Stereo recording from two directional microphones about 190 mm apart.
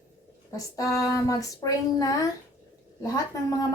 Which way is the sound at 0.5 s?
15° left (ahead or behind).